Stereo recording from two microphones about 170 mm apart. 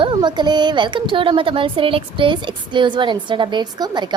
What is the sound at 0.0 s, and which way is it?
A woman's voice, 25° right (ahead or behind).